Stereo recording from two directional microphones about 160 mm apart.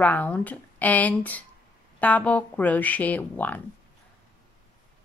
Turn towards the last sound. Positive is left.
turn(degrees=10)  # may be behind; listen again after turning